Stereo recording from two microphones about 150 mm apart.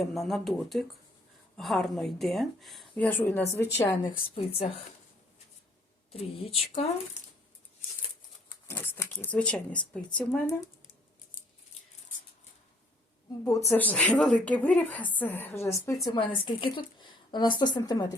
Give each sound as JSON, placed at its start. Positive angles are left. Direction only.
{"t": 0.0, "sound": "a woman's voice", "side_deg": 0}
{"t": 4.4, "sound": "a woman's voice", "side_deg": 40}
{"t": 6.4, "sound": "speech", "side_deg": 45}
{"t": 8.6, "sound": "a woman's voice", "side_deg": 15}
{"t": 13.5, "sound": "a woman's voice", "side_deg": 20}
{"t": 16.0, "sound": "a woman's voice", "side_deg": 30}